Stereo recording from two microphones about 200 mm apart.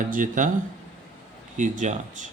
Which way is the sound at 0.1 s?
40° right (ahead or behind).